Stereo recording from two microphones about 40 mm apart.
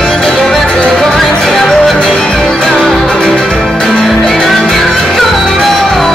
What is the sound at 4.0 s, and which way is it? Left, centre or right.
Music, centre.